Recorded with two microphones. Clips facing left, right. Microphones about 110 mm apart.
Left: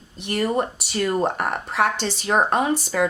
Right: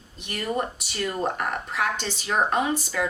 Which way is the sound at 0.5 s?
50° left (ahead or behind).